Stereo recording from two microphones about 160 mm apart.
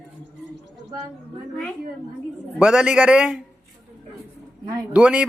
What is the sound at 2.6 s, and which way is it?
Speech, 5° right (ahead or behind).